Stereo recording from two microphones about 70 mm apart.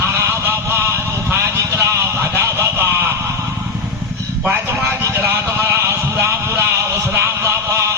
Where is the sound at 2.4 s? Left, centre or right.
Right.